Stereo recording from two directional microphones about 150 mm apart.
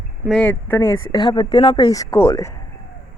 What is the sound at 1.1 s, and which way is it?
Speech, 30° left (ahead or behind).